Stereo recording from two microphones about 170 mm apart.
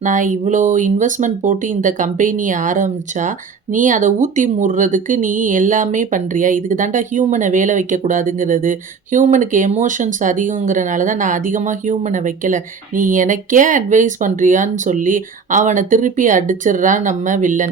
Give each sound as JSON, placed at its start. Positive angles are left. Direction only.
{"t": 0.0, "sound": "speech", "side_deg": -50}